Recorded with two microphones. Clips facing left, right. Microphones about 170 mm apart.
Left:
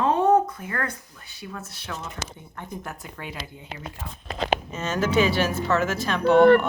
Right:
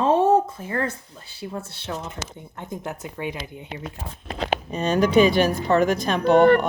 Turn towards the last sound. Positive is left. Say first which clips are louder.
# even
turn(degrees=-15)  # may be behind; listen again after turning